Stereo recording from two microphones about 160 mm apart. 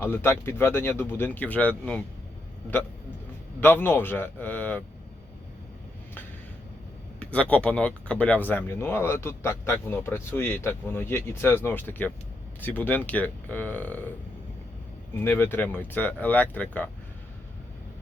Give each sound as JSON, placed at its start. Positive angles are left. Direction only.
{"t": 0.0, "sound": "speech", "side_deg": 15}
{"t": 3.6, "sound": "speech", "side_deg": 15}
{"t": 7.2, "sound": "speech", "side_deg": 10}
{"t": 15.1, "sound": "speech", "side_deg": 15}